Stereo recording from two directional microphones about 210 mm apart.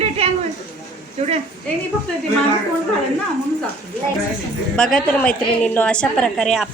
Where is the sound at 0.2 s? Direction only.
30° right (ahead or behind).